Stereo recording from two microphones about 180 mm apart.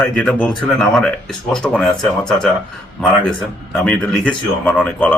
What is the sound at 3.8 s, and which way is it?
Speech, 5° left (ahead or behind).